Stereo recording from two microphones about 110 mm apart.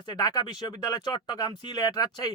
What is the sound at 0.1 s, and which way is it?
Speech, 40° left (ahead or behind).